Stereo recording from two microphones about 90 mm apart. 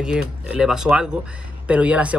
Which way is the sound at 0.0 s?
10° right (ahead or behind).